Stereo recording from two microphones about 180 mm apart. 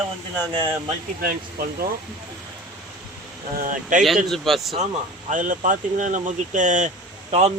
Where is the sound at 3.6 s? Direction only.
45° right (ahead or behind).